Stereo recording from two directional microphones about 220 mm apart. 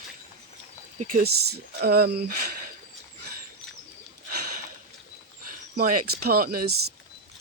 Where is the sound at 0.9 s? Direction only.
40° right (ahead or behind).